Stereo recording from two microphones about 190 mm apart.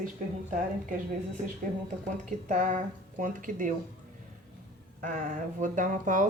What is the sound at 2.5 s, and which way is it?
Speech, 40° right (ahead or behind).